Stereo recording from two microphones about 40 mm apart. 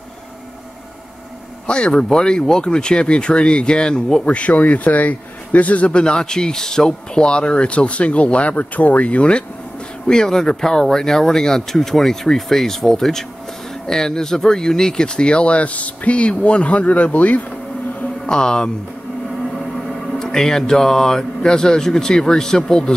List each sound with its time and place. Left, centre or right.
1.7 s speech: left
4.4 s speech: left
10.0 s speech: centre; by 17.5 s left
18.2 s speech: centre
20.2 s speech: centre